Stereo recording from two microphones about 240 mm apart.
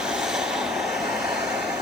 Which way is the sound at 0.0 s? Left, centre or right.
Centre.